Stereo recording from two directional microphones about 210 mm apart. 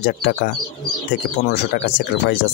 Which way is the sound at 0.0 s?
50° left (ahead or behind).